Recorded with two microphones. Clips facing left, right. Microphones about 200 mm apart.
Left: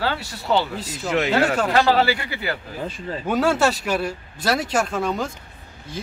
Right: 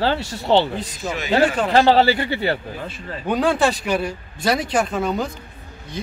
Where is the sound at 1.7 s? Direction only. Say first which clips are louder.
Right 5 dB; 30° right (ahead or behind).